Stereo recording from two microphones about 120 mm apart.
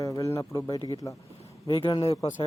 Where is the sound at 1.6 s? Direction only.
40° left (ahead or behind).